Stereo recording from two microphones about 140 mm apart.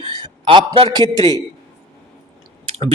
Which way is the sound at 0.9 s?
30° right (ahead or behind).